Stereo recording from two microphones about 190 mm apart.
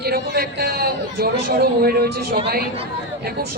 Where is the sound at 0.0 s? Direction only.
55° right (ahead or behind).